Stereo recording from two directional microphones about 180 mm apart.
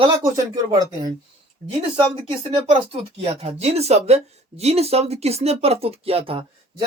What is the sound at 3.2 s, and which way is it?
Speech, 30° right (ahead or behind).